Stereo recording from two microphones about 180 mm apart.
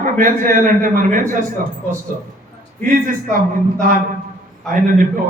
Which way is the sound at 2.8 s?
50° right (ahead or behind).